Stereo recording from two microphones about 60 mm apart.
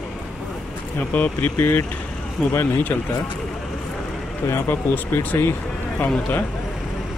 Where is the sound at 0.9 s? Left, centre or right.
Left.